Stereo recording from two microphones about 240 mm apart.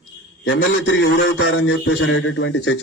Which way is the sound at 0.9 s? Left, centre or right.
Left.